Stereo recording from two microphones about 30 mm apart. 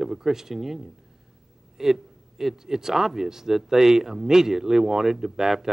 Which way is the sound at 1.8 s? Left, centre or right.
Centre.